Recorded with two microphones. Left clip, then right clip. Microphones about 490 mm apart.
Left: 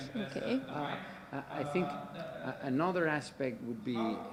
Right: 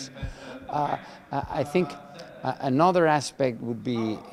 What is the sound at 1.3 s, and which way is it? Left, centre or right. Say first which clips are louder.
A man's voice: right 10 dB; right.